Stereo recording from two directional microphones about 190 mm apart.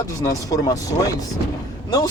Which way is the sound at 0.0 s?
20° left (ahead or behind).